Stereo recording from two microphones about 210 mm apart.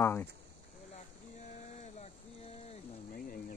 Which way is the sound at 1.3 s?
35° left (ahead or behind).